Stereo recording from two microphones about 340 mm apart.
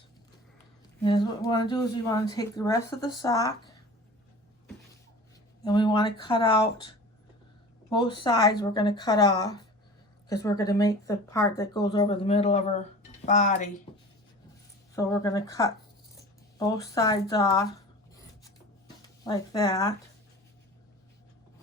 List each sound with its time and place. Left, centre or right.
1.0 s speech: centre
5.6 s speech: centre
13.9 s writing: centre
14.9 s speech: centre
19.0 s speech: centre